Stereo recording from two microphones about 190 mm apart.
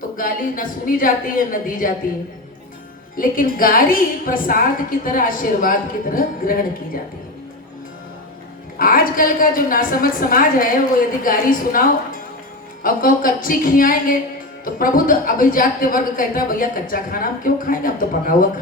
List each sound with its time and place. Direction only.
0.2 s speech: 45° left (ahead or behind)
3.2 s speech: 50° left (ahead or behind)
8.8 s speech: 50° left (ahead or behind)